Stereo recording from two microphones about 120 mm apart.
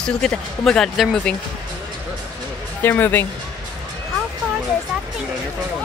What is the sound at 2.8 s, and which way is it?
Speech, 15° left (ahead or behind).